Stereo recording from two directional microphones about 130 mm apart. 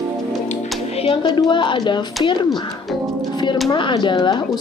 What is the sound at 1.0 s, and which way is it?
Speech, 40° left (ahead or behind).